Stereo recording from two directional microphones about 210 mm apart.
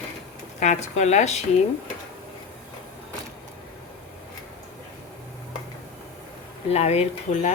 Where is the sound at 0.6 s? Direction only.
35° left (ahead or behind).